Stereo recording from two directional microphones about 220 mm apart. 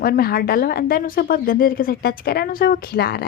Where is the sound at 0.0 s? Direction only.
45° left (ahead or behind).